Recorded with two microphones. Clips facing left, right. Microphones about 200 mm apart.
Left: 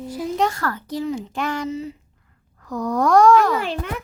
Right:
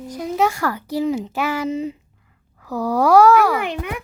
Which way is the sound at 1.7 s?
20° right (ahead or behind).